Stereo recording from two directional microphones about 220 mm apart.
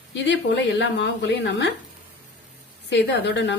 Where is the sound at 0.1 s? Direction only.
50° left (ahead or behind).